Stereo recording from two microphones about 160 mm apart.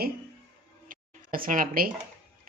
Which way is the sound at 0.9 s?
60° right (ahead or behind).